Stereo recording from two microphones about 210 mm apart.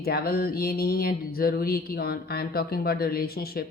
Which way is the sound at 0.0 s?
45° left (ahead or behind).